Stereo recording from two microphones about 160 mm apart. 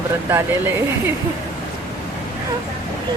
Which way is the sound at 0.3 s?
15° right (ahead or behind).